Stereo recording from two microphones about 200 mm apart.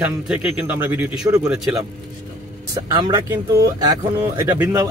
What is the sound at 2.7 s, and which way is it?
Speech, 20° right (ahead or behind).